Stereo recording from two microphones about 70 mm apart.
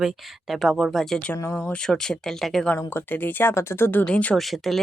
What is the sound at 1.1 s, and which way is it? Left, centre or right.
Speech, centre.